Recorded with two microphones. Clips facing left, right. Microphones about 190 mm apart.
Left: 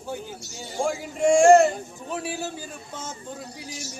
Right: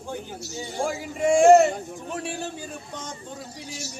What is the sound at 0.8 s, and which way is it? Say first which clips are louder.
A man's voice: left 2 dB; centre (ahead or behind).